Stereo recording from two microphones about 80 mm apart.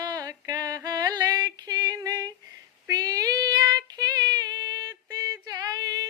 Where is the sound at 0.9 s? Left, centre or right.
Right.